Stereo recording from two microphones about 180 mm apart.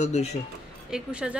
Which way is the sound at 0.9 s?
5° right (ahead or behind).